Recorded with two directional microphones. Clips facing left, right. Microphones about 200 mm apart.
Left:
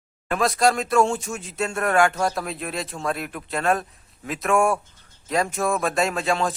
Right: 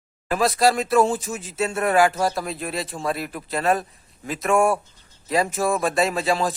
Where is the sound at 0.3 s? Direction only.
Centre (ahead or behind).